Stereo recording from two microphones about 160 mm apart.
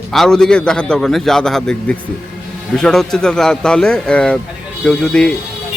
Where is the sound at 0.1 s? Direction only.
5° left (ahead or behind).